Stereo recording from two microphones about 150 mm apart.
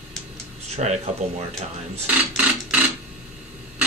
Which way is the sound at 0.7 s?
50° right (ahead or behind).